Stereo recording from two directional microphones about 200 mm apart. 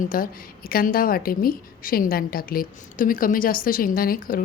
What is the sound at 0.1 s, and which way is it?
A woman's voice, 45° left (ahead or behind).